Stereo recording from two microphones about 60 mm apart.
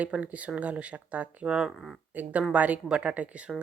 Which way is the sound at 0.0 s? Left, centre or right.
Right.